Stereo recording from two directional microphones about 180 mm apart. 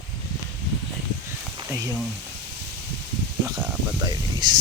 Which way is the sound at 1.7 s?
15° right (ahead or behind).